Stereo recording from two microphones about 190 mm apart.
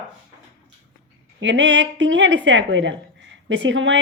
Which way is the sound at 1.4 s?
70° right (ahead or behind).